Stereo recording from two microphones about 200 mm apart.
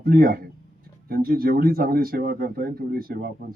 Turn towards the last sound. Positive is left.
turn(degrees=-50)  # may be behind; listen again after turning